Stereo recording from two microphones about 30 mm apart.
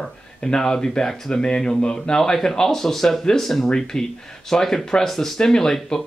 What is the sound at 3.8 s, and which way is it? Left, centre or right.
Speech, centre.